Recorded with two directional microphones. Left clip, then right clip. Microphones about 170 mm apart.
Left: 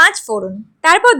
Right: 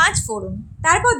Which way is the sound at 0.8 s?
40° left (ahead or behind).